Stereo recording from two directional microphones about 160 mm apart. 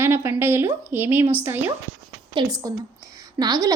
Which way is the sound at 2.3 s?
25° right (ahead or behind).